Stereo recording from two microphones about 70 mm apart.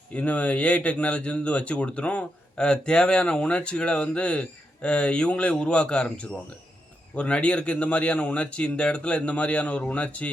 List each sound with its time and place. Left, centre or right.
0.1 s speech: centre